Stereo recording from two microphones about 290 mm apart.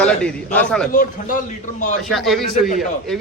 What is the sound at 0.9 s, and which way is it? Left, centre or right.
A man's voice, left.